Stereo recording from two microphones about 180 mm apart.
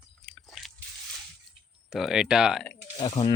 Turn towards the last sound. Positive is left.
turn(degrees=30)  # may be behind; listen again after turning